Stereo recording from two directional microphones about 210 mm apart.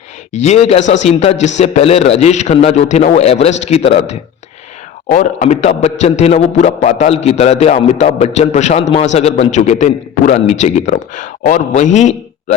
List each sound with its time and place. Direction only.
0.4 s a man's voice: 30° left (ahead or behind)